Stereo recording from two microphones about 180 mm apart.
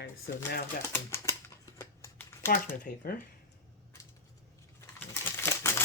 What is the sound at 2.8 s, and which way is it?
Speech, 50° left (ahead or behind).